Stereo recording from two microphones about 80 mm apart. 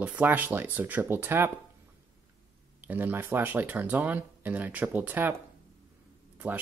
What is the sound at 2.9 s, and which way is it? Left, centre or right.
Speech, right.